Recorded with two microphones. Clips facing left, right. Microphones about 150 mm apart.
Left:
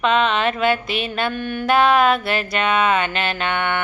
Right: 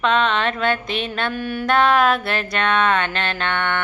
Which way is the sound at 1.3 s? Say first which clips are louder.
Left 1 dB; 5° right (ahead or behind).